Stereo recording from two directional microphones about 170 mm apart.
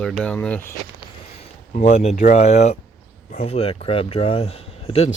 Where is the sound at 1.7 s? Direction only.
45° left (ahead or behind).